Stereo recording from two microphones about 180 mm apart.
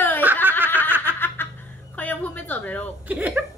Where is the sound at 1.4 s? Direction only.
10° left (ahead or behind).